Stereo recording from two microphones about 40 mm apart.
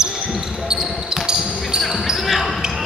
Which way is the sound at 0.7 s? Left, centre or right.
Centre.